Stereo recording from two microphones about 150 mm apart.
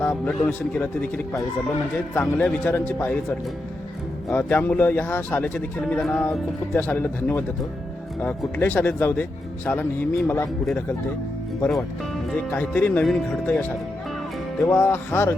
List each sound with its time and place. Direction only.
0.0 s a man's voice: 10° left (ahead or behind)
4.3 s a man's voice: 10° left (ahead or behind)
12.5 s a man's voice: 10° left (ahead or behind)